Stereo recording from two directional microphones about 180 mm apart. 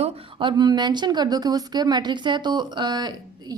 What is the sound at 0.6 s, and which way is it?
Speech, 25° right (ahead or behind).